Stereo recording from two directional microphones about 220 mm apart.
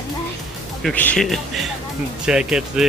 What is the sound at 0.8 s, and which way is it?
Speech, 5° left (ahead or behind).